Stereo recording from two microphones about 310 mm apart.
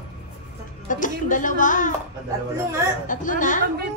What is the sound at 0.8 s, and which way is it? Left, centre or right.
Speech, left.